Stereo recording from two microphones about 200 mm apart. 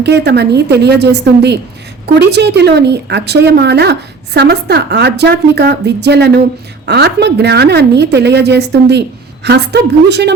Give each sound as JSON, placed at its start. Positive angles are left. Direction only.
{"t": 0.0, "sound": "a woman's voice", "side_deg": -55}